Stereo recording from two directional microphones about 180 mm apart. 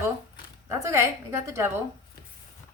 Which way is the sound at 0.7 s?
15° right (ahead or behind).